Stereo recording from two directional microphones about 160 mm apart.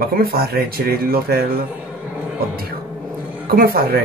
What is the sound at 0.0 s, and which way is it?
Speech, 70° right (ahead or behind).